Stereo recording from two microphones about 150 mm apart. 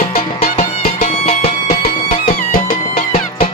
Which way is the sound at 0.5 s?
40° left (ahead or behind).